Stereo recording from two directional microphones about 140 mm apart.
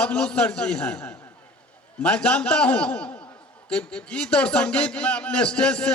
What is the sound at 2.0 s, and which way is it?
A man's voice, 10° left (ahead or behind).